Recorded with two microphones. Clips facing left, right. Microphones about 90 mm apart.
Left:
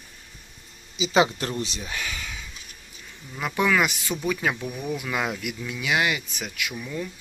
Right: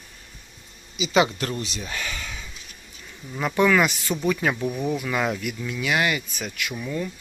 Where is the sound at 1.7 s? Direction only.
10° left (ahead or behind).